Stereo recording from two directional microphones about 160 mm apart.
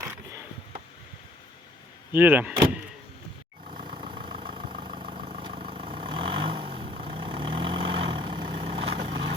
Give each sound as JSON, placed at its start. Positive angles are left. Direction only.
{"t": 0.0, "sound": "a sound", "side_deg": -15}
{"t": 2.1, "sound": "speech", "side_deg": -10}
{"t": 3.7, "sound": "vehicle", "side_deg": -55}
{"t": 4.1, "sound": "vehicle", "side_deg": -35}